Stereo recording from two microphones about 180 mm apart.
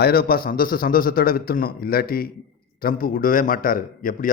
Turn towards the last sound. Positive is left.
turn(degrees=50)  # may be behind; listen again after turning